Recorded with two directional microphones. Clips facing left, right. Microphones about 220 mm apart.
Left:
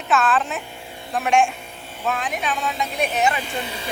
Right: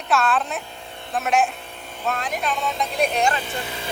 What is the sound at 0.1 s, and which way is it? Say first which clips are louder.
Speech: left 1 dB; centre (ahead or behind).